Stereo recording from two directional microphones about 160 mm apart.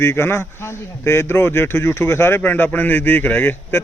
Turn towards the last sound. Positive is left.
turn(degrees=15)  # may be behind; listen again after turning